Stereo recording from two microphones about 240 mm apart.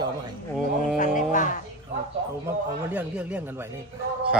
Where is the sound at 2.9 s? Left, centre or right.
Centre.